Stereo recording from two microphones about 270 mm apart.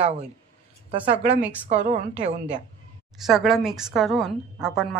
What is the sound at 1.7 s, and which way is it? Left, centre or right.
Speech, right.